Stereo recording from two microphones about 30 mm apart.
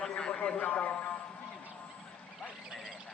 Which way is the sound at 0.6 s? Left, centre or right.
Left.